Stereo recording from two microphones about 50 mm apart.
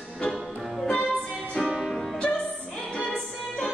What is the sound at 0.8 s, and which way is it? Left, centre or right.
Music, centre.